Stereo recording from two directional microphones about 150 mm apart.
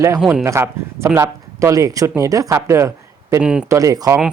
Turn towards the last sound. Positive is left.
turn(degrees=-20)  # may be behind; listen again after turning